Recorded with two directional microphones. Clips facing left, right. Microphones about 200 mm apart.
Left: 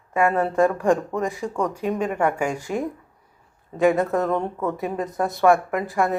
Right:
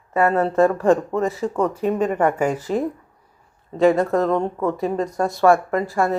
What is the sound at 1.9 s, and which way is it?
Speech, 10° left (ahead or behind).